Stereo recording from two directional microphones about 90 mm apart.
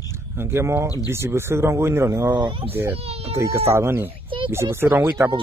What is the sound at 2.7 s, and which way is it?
Speech, 25° right (ahead or behind).